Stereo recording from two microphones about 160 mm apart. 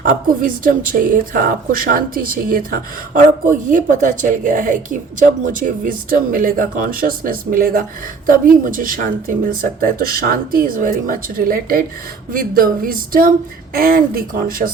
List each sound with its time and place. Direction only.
0.0 s a woman's voice: 60° right (ahead or behind)